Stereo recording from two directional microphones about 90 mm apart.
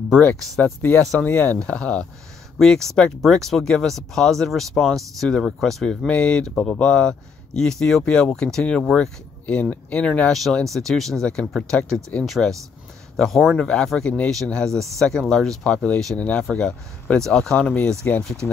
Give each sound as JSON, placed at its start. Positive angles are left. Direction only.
{"t": 0.2, "sound": "speech", "side_deg": 20}